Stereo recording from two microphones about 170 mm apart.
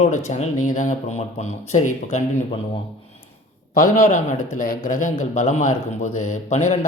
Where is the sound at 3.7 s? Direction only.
55° left (ahead or behind).